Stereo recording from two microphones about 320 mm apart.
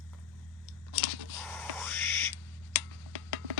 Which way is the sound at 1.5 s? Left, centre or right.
Centre.